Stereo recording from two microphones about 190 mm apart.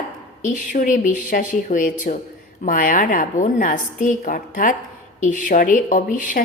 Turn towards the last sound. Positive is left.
turn(degrees=45)  # may be behind; listen again after turning